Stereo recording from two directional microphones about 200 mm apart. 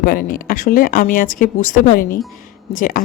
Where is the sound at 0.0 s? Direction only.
45° left (ahead or behind).